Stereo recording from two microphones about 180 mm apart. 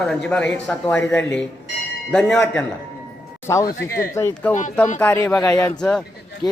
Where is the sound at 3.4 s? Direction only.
15° left (ahead or behind).